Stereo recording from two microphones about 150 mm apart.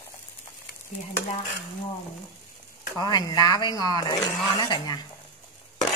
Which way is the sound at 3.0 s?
30° left (ahead or behind).